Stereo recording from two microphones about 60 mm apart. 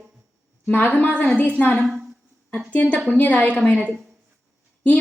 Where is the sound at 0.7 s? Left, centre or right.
Left.